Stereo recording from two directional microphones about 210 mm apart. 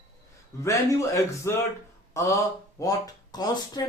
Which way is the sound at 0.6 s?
15° left (ahead or behind).